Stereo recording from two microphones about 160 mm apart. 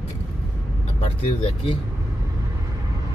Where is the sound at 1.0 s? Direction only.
35° left (ahead or behind).